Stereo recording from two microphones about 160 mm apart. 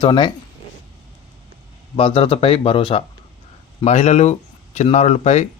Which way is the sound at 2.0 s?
35° left (ahead or behind).